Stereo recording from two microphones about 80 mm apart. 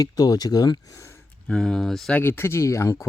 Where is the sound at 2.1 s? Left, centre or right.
Left.